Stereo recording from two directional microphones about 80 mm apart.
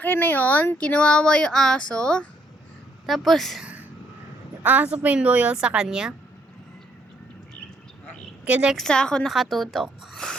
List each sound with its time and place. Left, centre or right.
0.0 s speech: left; by 3.6 s centre
3.6 s a sound: centre
4.6 s speech: right
8.4 s speech: centre
8.7 s speech: centre
9.3 s speech: centre